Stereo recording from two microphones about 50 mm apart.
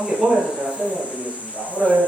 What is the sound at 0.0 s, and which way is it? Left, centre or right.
Speech, centre.